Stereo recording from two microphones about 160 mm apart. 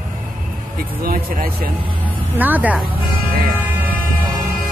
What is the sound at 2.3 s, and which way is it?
Speech, 10° right (ahead or behind).